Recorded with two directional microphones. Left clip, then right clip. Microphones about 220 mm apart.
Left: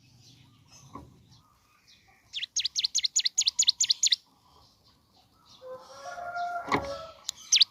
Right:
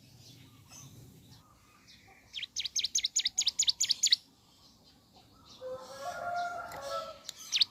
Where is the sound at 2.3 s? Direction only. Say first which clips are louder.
Left 6 dB; 25° left (ahead or behind).